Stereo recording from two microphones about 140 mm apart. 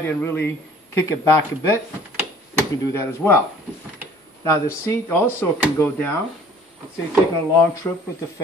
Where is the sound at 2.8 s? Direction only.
15° left (ahead or behind).